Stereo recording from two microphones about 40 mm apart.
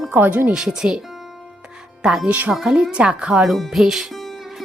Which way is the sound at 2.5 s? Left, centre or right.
Centre.